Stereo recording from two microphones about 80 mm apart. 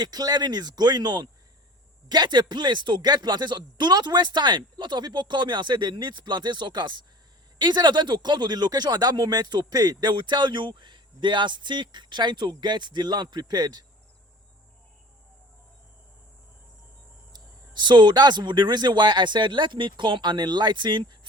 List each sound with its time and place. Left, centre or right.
0.0 s speech: right
17.3 s speech: right